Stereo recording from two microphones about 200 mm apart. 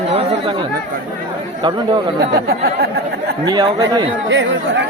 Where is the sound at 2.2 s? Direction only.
55° right (ahead or behind).